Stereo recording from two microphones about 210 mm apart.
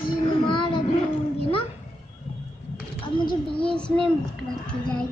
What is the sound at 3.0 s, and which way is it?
Speech, 25° left (ahead or behind).